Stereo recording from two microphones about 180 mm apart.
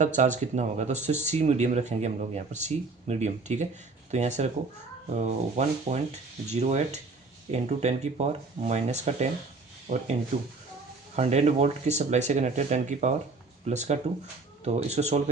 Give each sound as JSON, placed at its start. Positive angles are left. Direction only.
{"t": 0.0, "sound": "speech", "side_deg": -40}
{"t": 11.2, "sound": "speech", "side_deg": -40}